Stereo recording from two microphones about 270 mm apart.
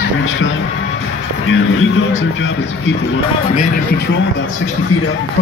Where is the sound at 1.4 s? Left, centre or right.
Left.